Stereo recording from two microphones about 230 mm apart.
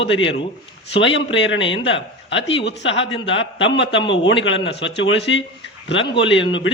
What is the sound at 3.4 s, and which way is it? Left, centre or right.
A man's voice, left.